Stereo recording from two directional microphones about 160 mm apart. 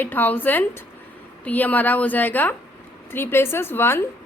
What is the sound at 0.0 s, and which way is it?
A woman's voice, 10° left (ahead or behind).